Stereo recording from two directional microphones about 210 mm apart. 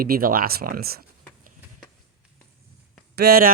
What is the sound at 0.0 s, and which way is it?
Speech, 45° right (ahead or behind).